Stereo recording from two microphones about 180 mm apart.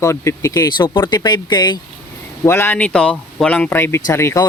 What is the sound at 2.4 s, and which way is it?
Speech, 15° left (ahead or behind).